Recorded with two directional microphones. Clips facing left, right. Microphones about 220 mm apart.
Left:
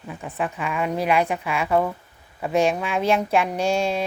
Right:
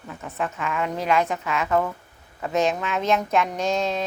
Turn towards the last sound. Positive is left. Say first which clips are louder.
# left 2 dB
turn(degrees=10)  # may be behind; listen again after turning